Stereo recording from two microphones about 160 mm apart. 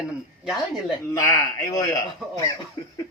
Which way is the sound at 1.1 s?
20° left (ahead or behind).